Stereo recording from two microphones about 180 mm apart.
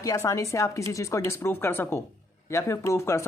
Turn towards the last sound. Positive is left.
turn(degrees=15)  # may be behind; listen again after turning